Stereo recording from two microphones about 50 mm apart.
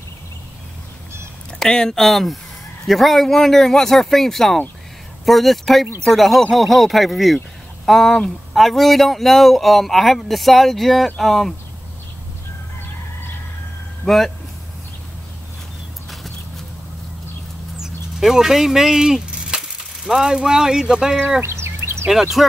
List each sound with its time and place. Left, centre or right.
1.6 s speech: centre
14.0 s speech: centre
17.7 s speech: centre
21.4 s a sound: right
22.1 s speech: centre